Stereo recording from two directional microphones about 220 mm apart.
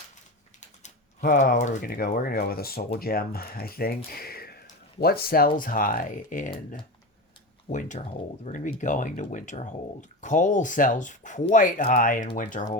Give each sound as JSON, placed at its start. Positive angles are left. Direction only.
{"t": 0.6, "sound": "speech", "side_deg": 35}